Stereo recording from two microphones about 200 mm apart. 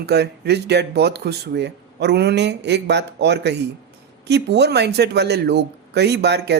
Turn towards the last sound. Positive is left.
turn(degrees=-55)  # may be behind; listen again after turning